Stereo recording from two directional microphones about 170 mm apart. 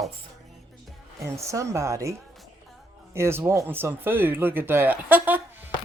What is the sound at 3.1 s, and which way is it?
Speech, 15° right (ahead or behind).